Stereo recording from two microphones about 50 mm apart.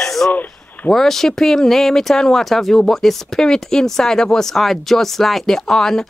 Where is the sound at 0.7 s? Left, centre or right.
Left.